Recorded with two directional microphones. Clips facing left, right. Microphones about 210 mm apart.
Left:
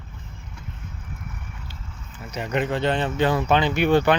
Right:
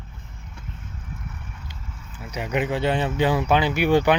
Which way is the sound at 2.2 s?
10° right (ahead or behind).